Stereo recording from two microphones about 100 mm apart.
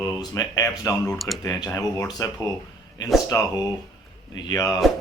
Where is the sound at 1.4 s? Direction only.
30° left (ahead or behind).